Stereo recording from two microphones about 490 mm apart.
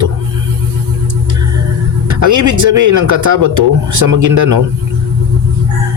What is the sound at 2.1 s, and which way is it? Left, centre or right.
Speech, right.